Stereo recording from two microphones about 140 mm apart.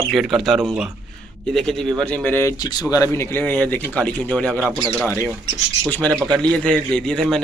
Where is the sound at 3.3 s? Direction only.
15° left (ahead or behind).